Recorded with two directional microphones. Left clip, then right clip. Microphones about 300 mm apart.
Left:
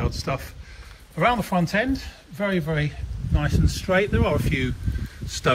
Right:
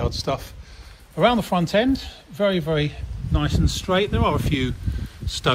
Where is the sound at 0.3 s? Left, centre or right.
Centre.